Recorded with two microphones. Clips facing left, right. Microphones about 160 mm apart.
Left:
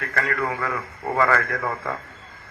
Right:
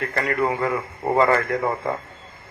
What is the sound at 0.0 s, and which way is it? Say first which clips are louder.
Speech: right 3 dB; 20° right (ahead or behind).